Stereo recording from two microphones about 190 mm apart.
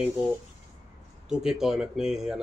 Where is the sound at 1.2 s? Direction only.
5° right (ahead or behind).